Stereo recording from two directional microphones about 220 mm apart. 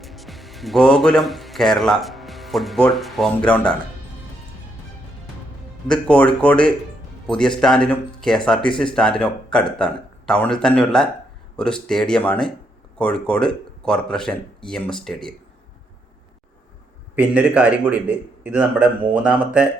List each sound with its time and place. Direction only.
0.0 s speech: centre (ahead or behind)
5.9 s speech: 5° left (ahead or behind)
17.2 s speech: 5° right (ahead or behind)